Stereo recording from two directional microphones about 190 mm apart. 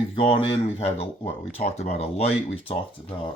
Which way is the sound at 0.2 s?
30° left (ahead or behind).